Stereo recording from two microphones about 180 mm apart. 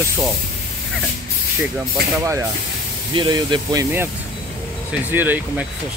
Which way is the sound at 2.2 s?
15° right (ahead or behind).